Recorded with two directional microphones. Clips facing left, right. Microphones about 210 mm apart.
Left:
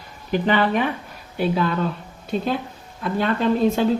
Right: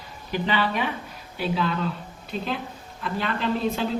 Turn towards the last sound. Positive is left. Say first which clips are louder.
# left 7 dB
turn(degrees=45)  # may be behind; listen again after turning